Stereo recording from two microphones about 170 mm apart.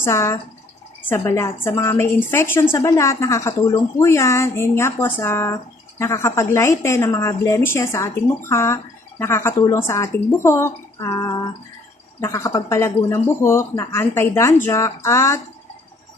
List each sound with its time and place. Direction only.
0.0 s a woman's voice: 15° left (ahead or behind)